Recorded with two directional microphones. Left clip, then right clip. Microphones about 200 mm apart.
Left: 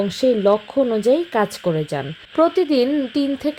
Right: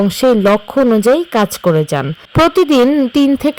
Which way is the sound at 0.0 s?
30° right (ahead or behind).